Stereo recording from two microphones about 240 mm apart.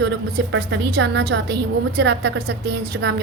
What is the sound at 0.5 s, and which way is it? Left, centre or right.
A woman's voice, right.